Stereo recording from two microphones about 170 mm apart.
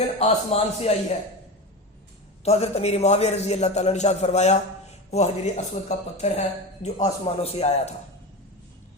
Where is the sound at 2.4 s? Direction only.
40° left (ahead or behind).